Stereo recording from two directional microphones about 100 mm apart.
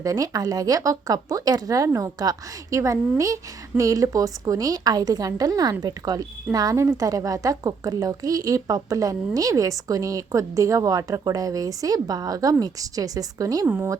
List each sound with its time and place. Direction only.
0.0 s a woman's voice: 40° right (ahead or behind)
13.7 s speech: 20° right (ahead or behind)